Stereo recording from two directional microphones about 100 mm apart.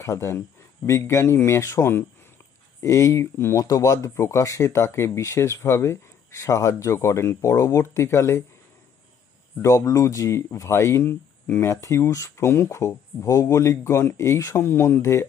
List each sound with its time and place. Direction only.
0.0 s speech: 30° left (ahead or behind)
9.6 s speech: 30° left (ahead or behind)